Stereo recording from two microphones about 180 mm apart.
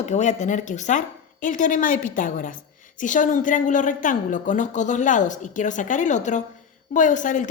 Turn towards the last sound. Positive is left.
turn(degrees=45)  # may be behind; listen again after turning